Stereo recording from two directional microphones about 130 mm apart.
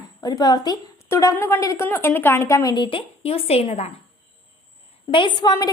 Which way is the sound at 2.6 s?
35° left (ahead or behind).